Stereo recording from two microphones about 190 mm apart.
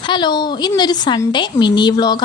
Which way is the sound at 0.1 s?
25° left (ahead or behind).